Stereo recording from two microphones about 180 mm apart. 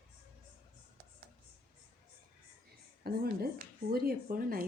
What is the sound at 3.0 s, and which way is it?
A woman's voice, 60° right (ahead or behind).